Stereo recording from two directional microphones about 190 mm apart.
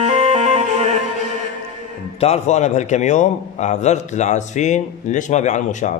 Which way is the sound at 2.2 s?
35° left (ahead or behind).